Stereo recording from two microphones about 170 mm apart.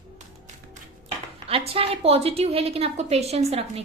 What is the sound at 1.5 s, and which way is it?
A woman's voice, 35° right (ahead or behind).